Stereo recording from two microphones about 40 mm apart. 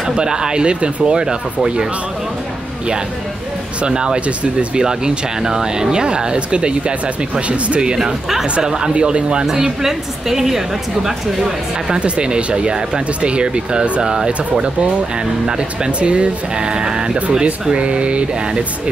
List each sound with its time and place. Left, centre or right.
0.0 s speech: centre
3.8 s speech: right
7.9 s a woman's voice: centre
9.5 s a woman's voice: centre
11.9 s speech: right